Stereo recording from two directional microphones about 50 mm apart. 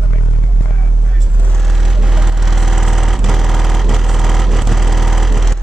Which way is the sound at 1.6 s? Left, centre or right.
Centre.